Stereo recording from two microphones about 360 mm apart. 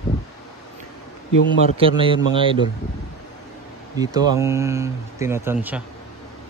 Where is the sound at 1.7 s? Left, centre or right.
Centre.